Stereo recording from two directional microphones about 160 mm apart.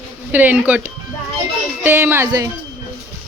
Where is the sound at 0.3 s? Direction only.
10° right (ahead or behind).